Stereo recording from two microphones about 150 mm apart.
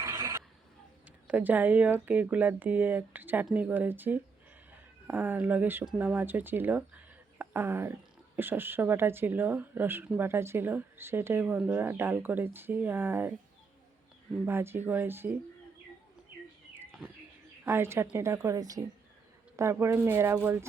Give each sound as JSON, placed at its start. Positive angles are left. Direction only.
{"t": 0.0, "sound": "a sound", "side_deg": -20}
{"t": 1.3, "sound": "speech", "side_deg": -10}
{"t": 14.4, "sound": "speech", "side_deg": -15}
{"t": 17.7, "sound": "speech", "side_deg": -15}